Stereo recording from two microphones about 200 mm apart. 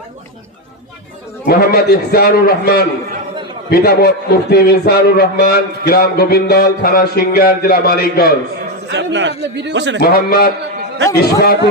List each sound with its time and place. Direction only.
1.5 s a man's voice: 50° left (ahead or behind)
8.9 s a man's voice: 65° right (ahead or behind)
10.0 s a man's voice: 50° left (ahead or behind)